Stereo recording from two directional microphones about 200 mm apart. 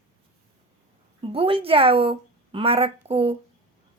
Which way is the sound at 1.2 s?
30° right (ahead or behind).